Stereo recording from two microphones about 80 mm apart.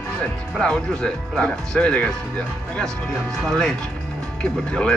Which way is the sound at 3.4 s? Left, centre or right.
Centre.